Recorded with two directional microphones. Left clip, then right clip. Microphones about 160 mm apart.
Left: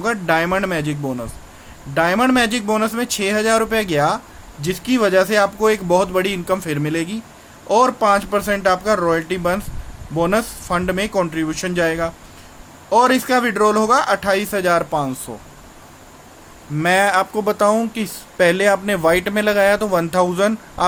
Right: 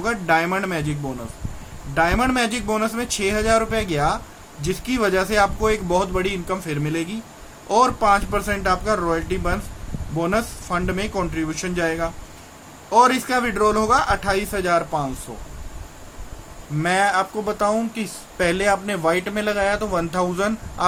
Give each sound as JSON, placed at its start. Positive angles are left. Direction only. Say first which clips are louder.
{"t": 0.0, "sound": "speech", "louder": "left 2 dB", "side_deg": 50}
{"t": 2.0, "sound": "speech", "louder": "left 3 dB", "side_deg": 50}
{"t": 16.8, "sound": "speech", "louder": "left 4 dB", "side_deg": 50}